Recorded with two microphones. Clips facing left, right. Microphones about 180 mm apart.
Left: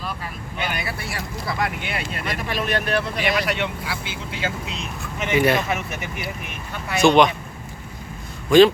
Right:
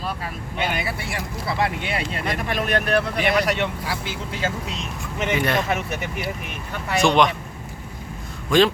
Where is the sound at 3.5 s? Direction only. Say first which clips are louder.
Right 2 dB; 40° right (ahead or behind).